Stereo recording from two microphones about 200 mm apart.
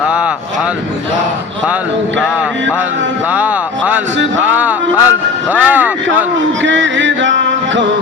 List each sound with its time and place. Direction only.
3.3 s a sound: 5° right (ahead or behind)
4.4 s music: 10° right (ahead or behind)
5.5 s speech: 10° right (ahead or behind)
6.6 s music: 65° right (ahead or behind)